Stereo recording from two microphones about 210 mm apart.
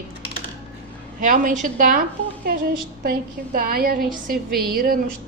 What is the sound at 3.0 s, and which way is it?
A woman's voice, 45° right (ahead or behind).